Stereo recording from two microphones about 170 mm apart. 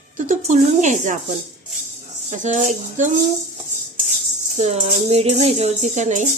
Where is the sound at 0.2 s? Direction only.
45° right (ahead or behind).